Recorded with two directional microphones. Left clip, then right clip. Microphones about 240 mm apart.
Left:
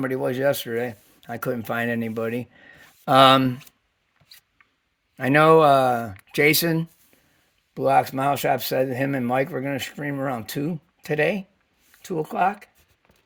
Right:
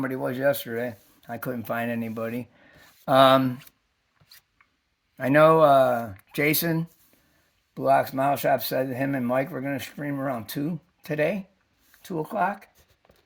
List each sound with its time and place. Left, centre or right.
0.0 s speech: left
5.1 s speech: left